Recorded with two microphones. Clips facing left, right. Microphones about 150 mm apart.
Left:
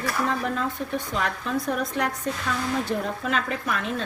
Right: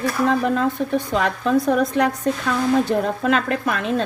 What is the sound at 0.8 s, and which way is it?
Dishes, 85° right.